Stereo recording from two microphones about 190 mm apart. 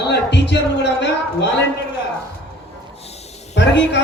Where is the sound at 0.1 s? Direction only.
65° left (ahead or behind).